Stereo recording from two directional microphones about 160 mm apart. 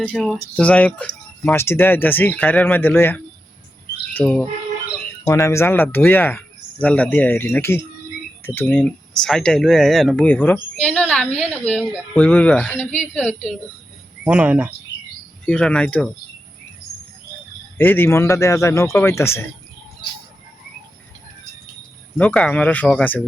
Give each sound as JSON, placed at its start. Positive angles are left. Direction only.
{"t": 0.1, "sound": "speech", "side_deg": 0}
{"t": 10.2, "sound": "speech", "side_deg": 10}
{"t": 14.3, "sound": "speech", "side_deg": -5}
{"t": 15.4, "sound": "speech", "side_deg": 5}
{"t": 17.7, "sound": "speech", "side_deg": 15}
{"t": 22.2, "sound": "speech", "side_deg": 5}